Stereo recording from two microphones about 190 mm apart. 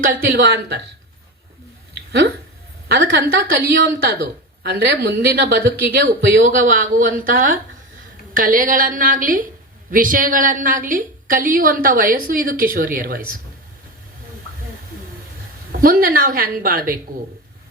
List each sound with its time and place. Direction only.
0.0 s a woman's voice: 45° right (ahead or behind)
2.0 s a sound: 55° right (ahead or behind)
2.9 s a woman's voice: 50° right (ahead or behind)
15.7 s a woman's voice: 50° right (ahead or behind)